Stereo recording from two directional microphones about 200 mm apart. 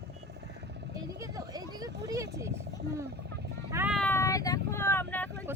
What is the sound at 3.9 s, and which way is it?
Vehicle, 10° left (ahead or behind).